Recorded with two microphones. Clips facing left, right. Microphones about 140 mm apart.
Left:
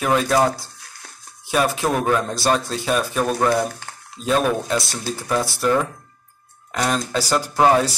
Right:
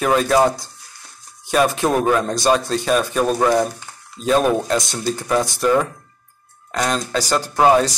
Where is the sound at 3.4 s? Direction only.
15° right (ahead or behind).